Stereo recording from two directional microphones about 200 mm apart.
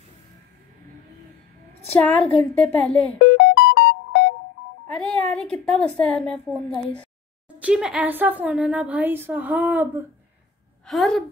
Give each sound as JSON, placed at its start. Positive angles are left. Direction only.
{"t": 2.0, "sound": "a woman's voice", "side_deg": 5}
{"t": 3.3, "sound": "music", "side_deg": 60}
{"t": 4.9, "sound": "a woman's voice", "side_deg": 5}
{"t": 7.5, "sound": "a woman's voice", "side_deg": -5}